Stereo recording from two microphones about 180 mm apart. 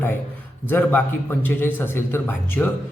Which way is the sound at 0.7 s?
10° left (ahead or behind).